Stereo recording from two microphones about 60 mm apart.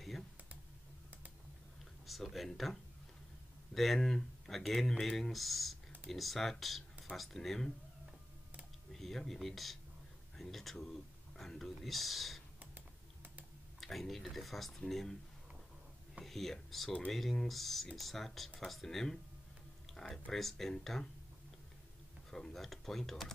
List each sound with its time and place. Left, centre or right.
2.0 s speech: centre
6.6 s a sound: centre
7.2 s speech: centre
8.9 s speech: centre
12.5 s typing: right
13.7 s speech: centre
16.2 s speech: centre
22.3 s speech: centre